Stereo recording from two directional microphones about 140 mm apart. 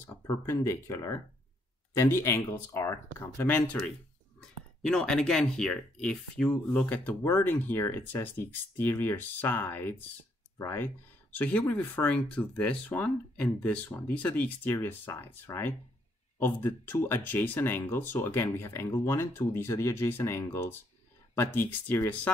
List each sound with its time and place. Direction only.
0.3 s speech: 20° left (ahead or behind)